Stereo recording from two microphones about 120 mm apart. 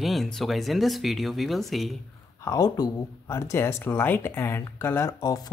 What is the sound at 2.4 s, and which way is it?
Speech, 30° left (ahead or behind).